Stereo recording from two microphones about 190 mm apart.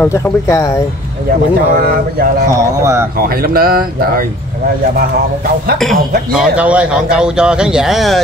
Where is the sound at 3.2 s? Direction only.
50° right (ahead or behind).